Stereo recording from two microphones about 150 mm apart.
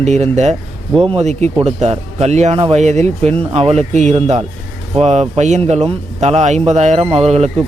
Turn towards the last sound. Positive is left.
turn(degrees=-45)  # may be behind; listen again after turning